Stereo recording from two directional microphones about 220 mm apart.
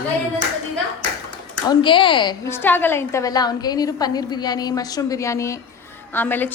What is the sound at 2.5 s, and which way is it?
A woman's voice, 10° left (ahead or behind).